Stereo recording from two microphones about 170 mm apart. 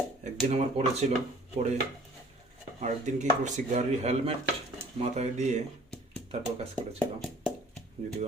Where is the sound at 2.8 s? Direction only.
45° right (ahead or behind).